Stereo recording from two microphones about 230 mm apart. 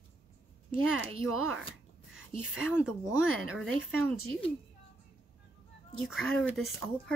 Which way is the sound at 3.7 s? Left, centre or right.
Right.